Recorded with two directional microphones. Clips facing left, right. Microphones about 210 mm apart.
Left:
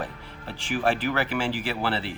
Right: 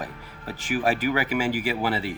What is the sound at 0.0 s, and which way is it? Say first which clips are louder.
Speech: left 1 dB; 10° right (ahead or behind).